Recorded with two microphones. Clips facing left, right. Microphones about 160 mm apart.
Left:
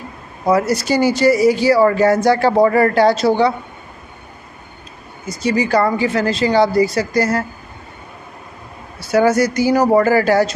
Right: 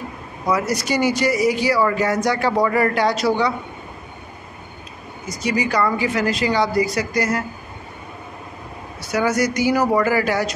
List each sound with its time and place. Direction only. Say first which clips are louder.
0.5 s speech: left 5 dB; 30° left (ahead or behind)
5.3 s speech: left 5 dB; 30° left (ahead or behind)
9.0 s speech: left 6 dB; 30° left (ahead or behind)